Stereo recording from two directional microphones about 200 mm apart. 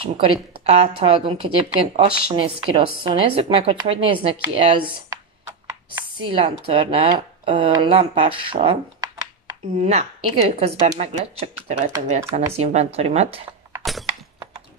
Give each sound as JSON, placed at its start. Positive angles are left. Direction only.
{"t": 0.2, "sound": "speech", "side_deg": -30}
{"t": 9.8, "sound": "a woman's voice", "side_deg": -35}
{"t": 13.8, "sound": "crack", "side_deg": 0}